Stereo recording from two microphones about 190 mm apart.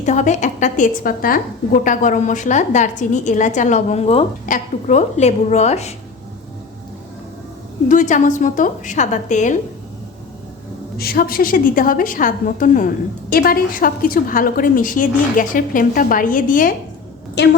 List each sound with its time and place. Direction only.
0.0 s a woman's voice: 40° left (ahead or behind)
7.9 s a woman's voice: 40° left (ahead or behind)
10.9 s a woman's voice: 55° left (ahead or behind)
17.4 s a woman's voice: 60° left (ahead or behind)